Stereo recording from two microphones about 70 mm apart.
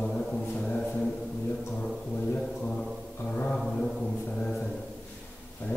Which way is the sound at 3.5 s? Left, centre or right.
Centre.